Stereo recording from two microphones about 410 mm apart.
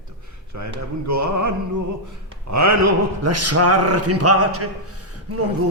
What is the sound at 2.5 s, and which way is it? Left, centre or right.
Speech, right.